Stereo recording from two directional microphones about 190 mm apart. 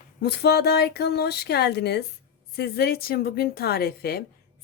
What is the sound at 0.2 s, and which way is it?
Speech, 60° left (ahead or behind).